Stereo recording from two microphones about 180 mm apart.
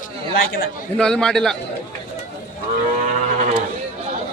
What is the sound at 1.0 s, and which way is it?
Speech, 5° left (ahead or behind).